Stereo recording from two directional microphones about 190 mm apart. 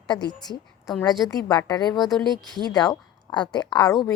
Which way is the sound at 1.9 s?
Centre (ahead or behind).